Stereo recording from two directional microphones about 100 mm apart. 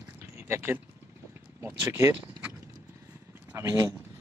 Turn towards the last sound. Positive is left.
turn(degrees=-35)  # may be behind; listen again after turning